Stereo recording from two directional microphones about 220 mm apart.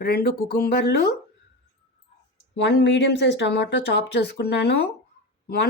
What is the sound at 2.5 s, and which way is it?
Speech, 50° left (ahead or behind).